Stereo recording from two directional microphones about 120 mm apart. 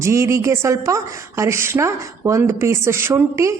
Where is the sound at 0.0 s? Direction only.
25° right (ahead or behind).